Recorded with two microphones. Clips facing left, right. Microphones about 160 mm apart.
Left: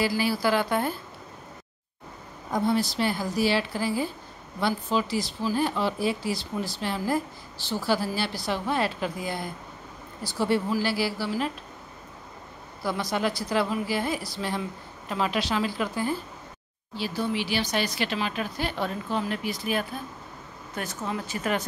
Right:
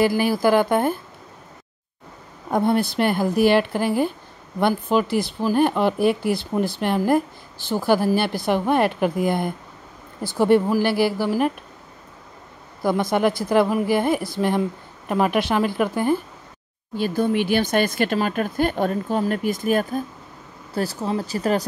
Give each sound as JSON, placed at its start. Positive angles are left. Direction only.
{"t": 0.0, "sound": "speech", "side_deg": -50}
{"t": 2.5, "sound": "speech", "side_deg": -60}
{"t": 12.8, "sound": "speech", "side_deg": -50}
{"t": 20.7, "sound": "speech", "side_deg": -35}